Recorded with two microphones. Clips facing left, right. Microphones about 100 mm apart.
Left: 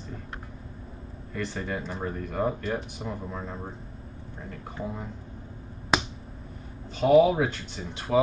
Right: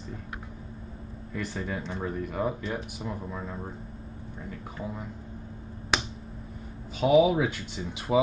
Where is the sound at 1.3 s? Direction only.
5° right (ahead or behind).